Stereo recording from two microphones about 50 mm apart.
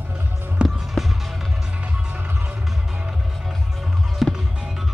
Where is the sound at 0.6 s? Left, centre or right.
Centre.